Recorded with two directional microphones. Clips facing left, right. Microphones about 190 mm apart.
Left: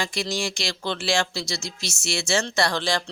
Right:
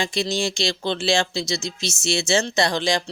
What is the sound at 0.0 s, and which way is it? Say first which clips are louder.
Speech: right 4 dB; 25° right (ahead or behind).